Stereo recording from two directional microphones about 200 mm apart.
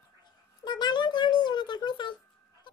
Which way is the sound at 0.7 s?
20° left (ahead or behind).